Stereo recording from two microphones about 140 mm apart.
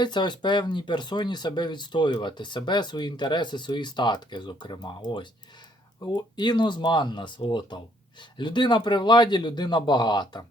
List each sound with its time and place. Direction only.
0.0 s speech: 30° left (ahead or behind)